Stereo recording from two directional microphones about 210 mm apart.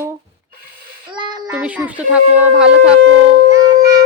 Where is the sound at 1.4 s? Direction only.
5° right (ahead or behind).